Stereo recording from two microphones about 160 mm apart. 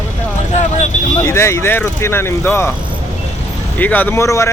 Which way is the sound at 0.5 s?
45° left (ahead or behind).